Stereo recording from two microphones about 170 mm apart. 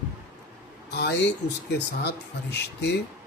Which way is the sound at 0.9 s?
75° left (ahead or behind).